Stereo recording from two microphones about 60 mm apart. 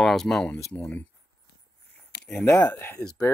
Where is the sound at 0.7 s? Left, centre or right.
Left.